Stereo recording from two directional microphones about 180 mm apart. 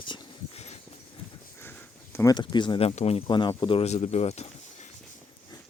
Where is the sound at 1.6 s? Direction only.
10° left (ahead or behind).